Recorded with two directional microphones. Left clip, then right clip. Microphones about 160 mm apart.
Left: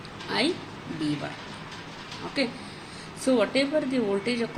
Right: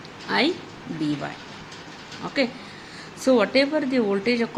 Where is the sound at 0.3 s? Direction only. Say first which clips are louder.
Right 4 dB; 55° right (ahead or behind).